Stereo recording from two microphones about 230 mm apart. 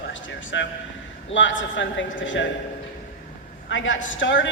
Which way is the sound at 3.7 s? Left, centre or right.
Left.